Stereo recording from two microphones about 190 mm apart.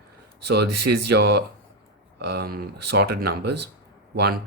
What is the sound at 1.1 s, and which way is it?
Speech, 60° right (ahead or behind).